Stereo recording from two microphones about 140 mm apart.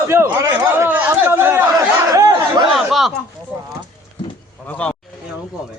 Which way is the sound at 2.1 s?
25° right (ahead or behind).